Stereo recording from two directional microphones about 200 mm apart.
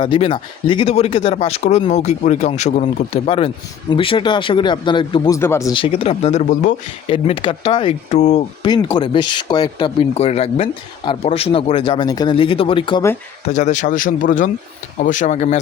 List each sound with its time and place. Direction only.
0.0 s speech: 25° left (ahead or behind)
7.1 s speech: 25° left (ahead or behind)
8.6 s speech: 25° left (ahead or behind)
13.4 s speech: 35° left (ahead or behind)